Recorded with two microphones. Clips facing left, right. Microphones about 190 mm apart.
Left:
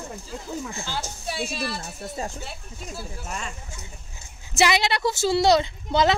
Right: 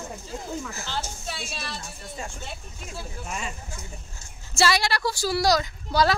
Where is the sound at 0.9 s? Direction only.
10° left (ahead or behind).